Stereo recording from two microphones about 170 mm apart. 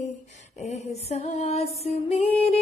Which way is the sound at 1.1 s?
40° left (ahead or behind).